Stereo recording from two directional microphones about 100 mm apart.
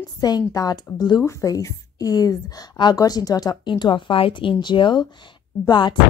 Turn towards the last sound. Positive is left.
turn(degrees=45)  # may be behind; listen again after turning